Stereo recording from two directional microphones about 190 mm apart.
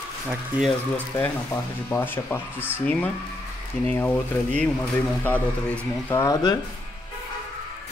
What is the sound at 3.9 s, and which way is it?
Speech, 10° left (ahead or behind).